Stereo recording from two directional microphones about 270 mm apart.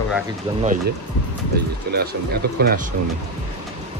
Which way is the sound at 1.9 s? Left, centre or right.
Right.